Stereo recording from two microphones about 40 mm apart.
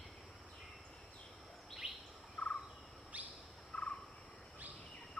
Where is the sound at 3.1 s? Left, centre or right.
Right.